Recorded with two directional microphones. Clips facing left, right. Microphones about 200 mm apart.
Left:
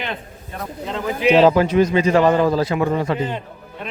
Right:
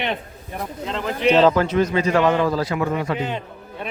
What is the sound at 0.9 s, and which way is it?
Speech, 5° left (ahead or behind).